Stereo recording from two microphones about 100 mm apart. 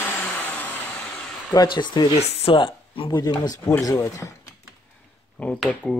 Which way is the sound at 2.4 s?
60° left (ahead or behind).